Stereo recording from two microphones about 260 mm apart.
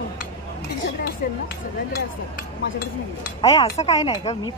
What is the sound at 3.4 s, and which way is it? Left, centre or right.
Speech, centre.